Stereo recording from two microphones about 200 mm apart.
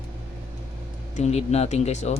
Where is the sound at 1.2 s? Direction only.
35° left (ahead or behind).